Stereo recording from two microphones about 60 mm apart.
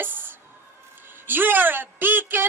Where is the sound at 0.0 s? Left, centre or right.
Right.